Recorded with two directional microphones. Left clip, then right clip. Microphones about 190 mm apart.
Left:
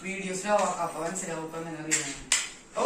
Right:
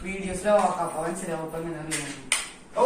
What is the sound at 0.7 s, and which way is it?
Speech, 15° left (ahead or behind).